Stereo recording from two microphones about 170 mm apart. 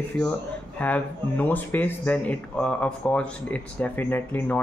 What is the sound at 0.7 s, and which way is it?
Speech, 10° left (ahead or behind).